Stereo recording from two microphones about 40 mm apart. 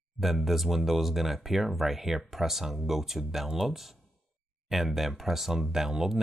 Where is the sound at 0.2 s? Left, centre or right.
Centre.